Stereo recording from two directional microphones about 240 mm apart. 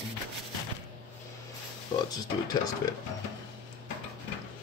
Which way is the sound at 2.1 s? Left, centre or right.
Centre.